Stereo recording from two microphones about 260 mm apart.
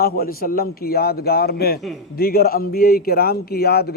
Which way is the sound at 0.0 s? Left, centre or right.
Left.